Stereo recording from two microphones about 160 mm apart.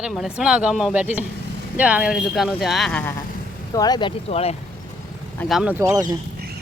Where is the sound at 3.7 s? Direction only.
25° left (ahead or behind).